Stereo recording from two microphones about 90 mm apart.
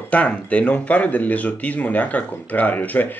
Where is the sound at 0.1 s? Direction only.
15° left (ahead or behind).